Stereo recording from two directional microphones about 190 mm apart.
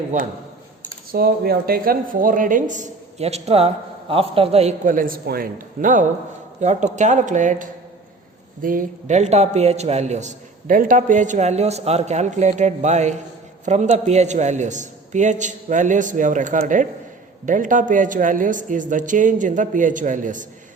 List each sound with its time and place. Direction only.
1.1 s a man's voice: 50° right (ahead or behind)